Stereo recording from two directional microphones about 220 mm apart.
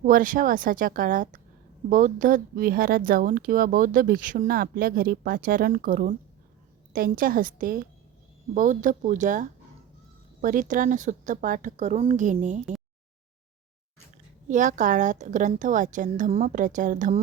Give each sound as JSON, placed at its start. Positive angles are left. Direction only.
{"t": 0.0, "sound": "speech", "side_deg": -40}
{"t": 14.4, "sound": "speech", "side_deg": -35}